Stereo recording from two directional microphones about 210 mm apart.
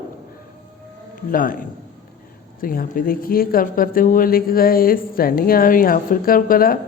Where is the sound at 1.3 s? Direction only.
40° left (ahead or behind).